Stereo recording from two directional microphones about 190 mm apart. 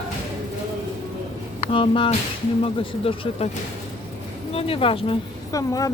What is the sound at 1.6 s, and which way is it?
Speech, 25° left (ahead or behind).